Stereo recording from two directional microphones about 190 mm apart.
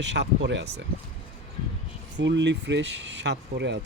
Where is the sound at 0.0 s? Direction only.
65° right (ahead or behind).